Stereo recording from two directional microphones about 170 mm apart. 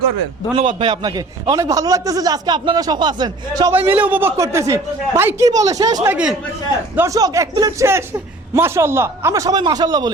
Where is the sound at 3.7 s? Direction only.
10° right (ahead or behind).